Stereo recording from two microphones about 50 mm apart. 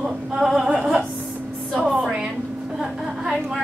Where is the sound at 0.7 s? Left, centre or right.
Centre.